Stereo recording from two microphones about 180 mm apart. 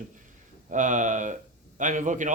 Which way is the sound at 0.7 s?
45° right (ahead or behind).